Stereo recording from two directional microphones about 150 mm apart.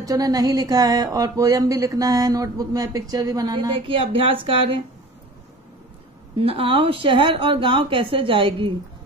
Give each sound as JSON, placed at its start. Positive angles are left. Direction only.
{"t": 0.0, "sound": "speech", "side_deg": -25}
{"t": 6.4, "sound": "a woman's voice", "side_deg": -40}